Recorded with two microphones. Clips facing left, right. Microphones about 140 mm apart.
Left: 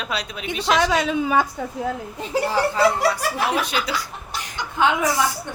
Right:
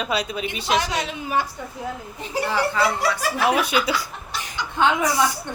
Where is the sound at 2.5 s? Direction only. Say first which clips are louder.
Left 2 dB; 35° left (ahead or behind).